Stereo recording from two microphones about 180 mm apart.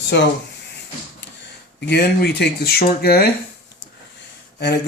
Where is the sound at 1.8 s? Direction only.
65° left (ahead or behind).